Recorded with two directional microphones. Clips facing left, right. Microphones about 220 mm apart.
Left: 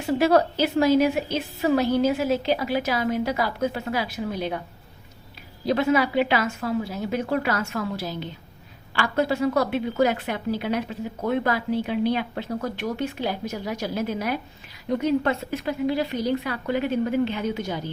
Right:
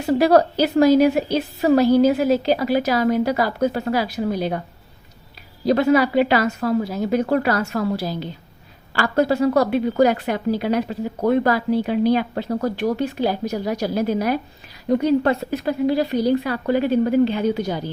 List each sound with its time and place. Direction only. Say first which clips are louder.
0.0 s a woman's voice: right 4 dB; 40° right (ahead or behind)
5.6 s a woman's voice: right 5 dB; 40° right (ahead or behind)